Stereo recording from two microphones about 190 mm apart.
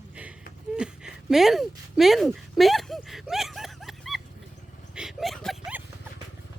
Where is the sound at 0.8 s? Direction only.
5° right (ahead or behind).